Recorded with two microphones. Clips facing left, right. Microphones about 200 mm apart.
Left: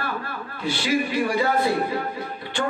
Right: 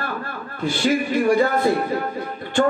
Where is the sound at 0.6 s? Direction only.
50° right (ahead or behind).